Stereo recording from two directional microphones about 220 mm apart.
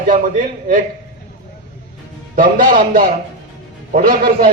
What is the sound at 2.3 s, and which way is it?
Speech, 40° right (ahead or behind).